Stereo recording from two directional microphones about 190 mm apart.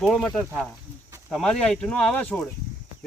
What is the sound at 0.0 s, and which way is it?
Speech, centre (ahead or behind).